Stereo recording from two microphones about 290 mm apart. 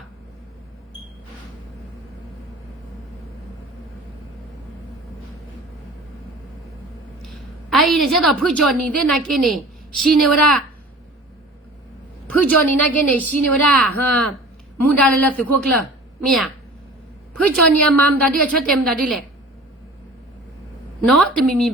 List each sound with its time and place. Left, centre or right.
7.2 s a woman's voice: centre
12.3 s a woman's voice: centre
21.1 s a woman's voice: centre